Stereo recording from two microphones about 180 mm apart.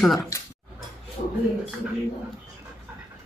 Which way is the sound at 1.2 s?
50° left (ahead or behind).